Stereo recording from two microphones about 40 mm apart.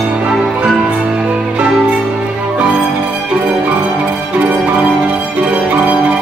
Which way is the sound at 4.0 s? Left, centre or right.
Right.